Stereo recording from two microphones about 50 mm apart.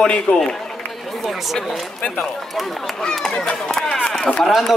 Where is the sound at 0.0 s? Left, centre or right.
Centre.